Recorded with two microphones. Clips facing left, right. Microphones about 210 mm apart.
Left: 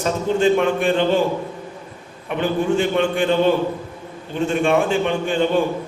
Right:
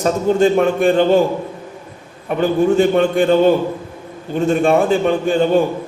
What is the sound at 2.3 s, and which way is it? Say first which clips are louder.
A man's voice: right 5 dB; 40° right (ahead or behind).